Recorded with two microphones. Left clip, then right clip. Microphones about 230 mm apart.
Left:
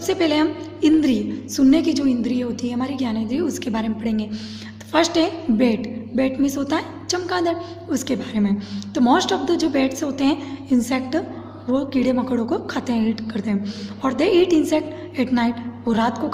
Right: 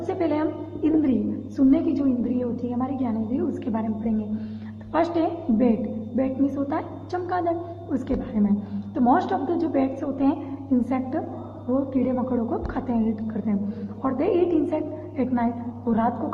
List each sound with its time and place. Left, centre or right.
0.1 s a woman's voice: left